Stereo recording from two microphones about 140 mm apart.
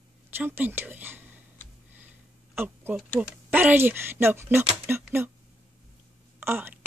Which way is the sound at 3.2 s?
10° right (ahead or behind).